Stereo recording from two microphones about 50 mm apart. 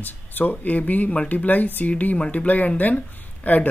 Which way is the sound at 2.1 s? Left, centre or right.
Centre.